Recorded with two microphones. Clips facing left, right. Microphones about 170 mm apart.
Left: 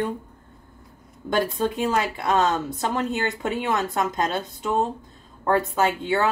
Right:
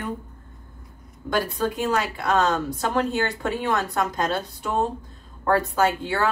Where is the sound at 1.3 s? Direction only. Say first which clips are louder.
Left 1 dB; 25° left (ahead or behind).